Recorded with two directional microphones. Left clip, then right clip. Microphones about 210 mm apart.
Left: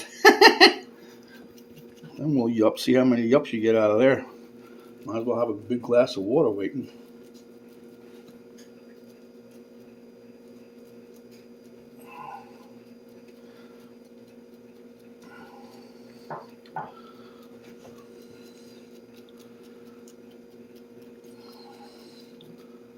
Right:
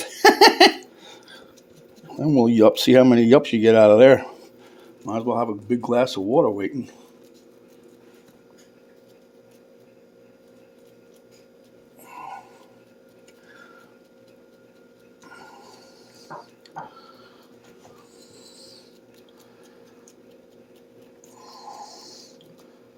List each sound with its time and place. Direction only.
0.0 s laughter: 45° right (ahead or behind)
2.2 s speech: 50° right (ahead or behind)